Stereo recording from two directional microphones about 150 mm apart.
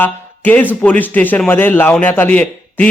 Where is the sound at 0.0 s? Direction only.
10° left (ahead or behind).